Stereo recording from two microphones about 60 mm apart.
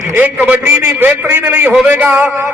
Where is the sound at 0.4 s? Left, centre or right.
Right.